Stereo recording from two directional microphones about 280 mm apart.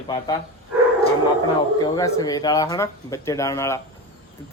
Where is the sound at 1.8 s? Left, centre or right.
Centre.